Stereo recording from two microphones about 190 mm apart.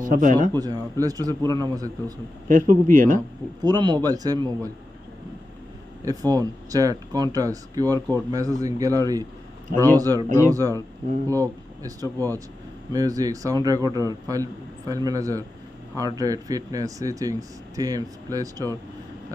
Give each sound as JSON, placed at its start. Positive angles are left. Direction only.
{"t": 0.0, "sound": "speech", "side_deg": -45}
{"t": 0.5, "sound": "speech", "side_deg": -20}
{"t": 2.4, "sound": "speech", "side_deg": -45}
{"t": 3.6, "sound": "speech", "side_deg": -20}
{"t": 6.0, "sound": "speech", "side_deg": -20}